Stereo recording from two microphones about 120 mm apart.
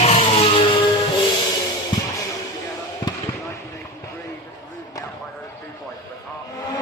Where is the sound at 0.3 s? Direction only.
45° left (ahead or behind).